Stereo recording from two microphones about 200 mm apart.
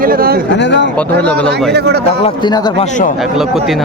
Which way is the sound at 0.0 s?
45° right (ahead or behind).